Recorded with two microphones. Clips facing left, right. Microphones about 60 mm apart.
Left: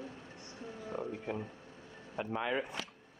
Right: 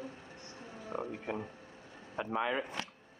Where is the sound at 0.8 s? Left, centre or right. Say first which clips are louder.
Right 1 dB; right.